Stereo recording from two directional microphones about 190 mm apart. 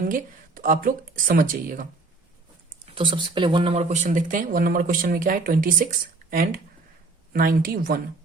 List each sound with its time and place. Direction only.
0.0 s speech: 45° right (ahead or behind)
2.9 s speech: 25° right (ahead or behind); by 8.0 s 50° right (ahead or behind)